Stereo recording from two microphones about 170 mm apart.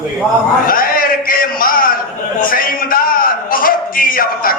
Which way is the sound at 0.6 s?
55° left (ahead or behind).